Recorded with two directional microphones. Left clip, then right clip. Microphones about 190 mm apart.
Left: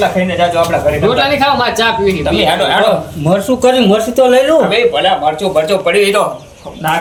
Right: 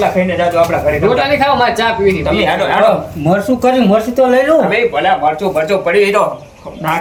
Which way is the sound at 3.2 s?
10° left (ahead or behind).